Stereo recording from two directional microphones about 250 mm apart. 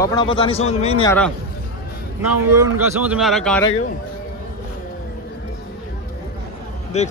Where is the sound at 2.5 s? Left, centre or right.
Centre.